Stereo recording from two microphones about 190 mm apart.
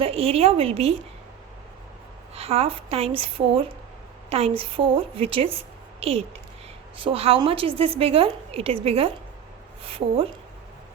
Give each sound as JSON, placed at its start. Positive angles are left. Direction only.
{"t": 0.0, "sound": "a woman's voice", "side_deg": -30}
{"t": 2.3, "sound": "a woman's voice", "side_deg": -30}